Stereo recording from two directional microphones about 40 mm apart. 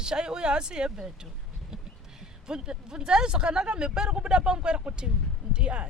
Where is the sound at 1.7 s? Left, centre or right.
Centre.